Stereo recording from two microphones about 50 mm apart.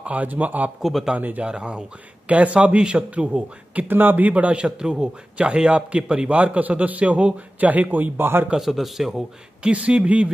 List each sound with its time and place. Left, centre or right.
0.0 s a man's voice: right
1.4 s a man's voice: centre
3.8 s a man's voice: right
4.3 s a man's voice: right
8.5 s a man's voice: centre
9.6 s a man's voice: right